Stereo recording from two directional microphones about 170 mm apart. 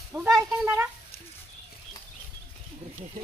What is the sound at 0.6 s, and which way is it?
Speech, 10° right (ahead or behind).